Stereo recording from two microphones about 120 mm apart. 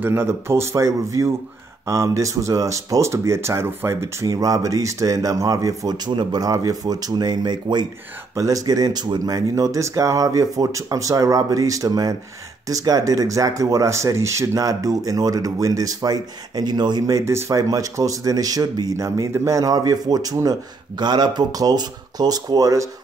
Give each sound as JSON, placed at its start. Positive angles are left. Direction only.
{"t": 0.0, "sound": "speech", "side_deg": -20}